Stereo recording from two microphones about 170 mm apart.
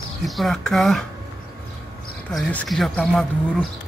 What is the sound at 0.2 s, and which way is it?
Speech, centre (ahead or behind).